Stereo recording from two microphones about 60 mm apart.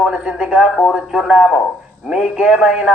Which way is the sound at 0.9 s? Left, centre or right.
Centre.